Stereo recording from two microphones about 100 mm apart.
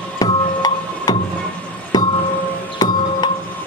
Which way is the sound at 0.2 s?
40° left (ahead or behind).